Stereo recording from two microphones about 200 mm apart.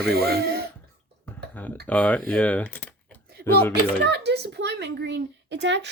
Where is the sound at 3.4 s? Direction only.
50° right (ahead or behind).